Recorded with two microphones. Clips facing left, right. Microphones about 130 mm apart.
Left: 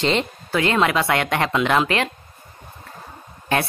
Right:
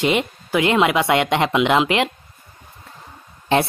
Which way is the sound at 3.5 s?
25° right (ahead or behind).